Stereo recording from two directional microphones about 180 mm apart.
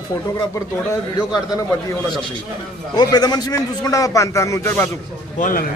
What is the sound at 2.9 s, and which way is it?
A man's voice, 20° left (ahead or behind).